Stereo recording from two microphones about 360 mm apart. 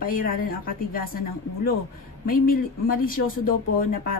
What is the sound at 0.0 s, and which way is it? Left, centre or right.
A woman's voice, left.